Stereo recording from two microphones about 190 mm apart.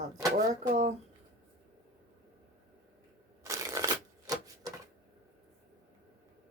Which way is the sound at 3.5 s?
15° right (ahead or behind).